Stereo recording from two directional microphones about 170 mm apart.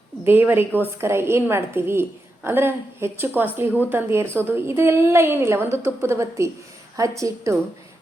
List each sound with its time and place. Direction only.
0.3 s a woman's voice: 10° right (ahead or behind)